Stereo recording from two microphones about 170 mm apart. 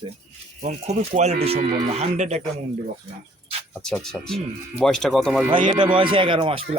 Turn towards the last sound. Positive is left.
turn(degrees=-35)  # may be behind; listen again after turning